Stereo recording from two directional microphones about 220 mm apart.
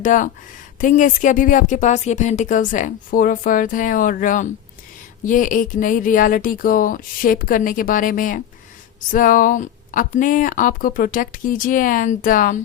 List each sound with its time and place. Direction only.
0.0 s speech: 35° left (ahead or behind)